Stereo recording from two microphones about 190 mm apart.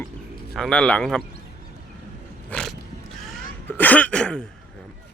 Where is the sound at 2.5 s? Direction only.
5° left (ahead or behind).